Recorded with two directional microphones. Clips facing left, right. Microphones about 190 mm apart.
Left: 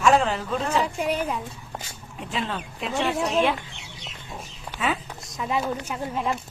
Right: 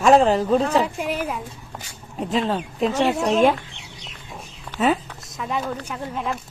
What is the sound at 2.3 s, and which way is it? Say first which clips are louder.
A man's voice: right 7 dB; 40° right (ahead or behind).